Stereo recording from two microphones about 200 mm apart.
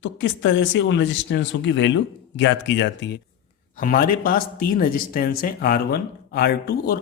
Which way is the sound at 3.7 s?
45° left (ahead or behind).